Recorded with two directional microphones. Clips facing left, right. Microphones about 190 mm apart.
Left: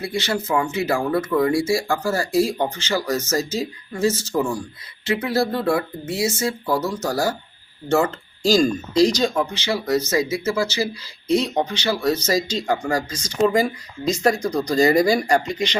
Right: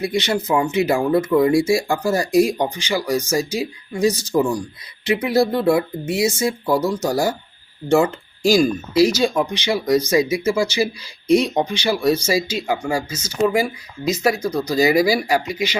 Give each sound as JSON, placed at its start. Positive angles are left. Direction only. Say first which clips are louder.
{"t": 0.0, "sound": "speech", "louder": "right 4 dB", "side_deg": -20}